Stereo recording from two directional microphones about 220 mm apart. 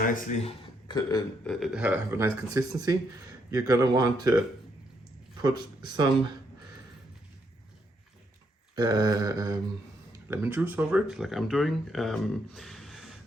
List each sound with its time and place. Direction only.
0.0 s speech: 35° left (ahead or behind); by 1.2 s 20° left (ahead or behind)
1.5 s speech: centre (ahead or behind); by 4.4 s 15° right (ahead or behind)
5.4 s speech: 20° right (ahead or behind)
8.7 s speech: 15° right (ahead or behind); by 13.1 s centre (ahead or behind)